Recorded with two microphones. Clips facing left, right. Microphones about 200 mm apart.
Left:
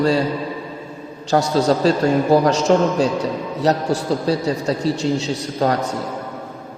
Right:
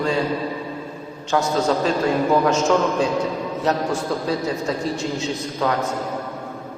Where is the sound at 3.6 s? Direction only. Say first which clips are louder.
Left 4 dB; 35° left (ahead or behind).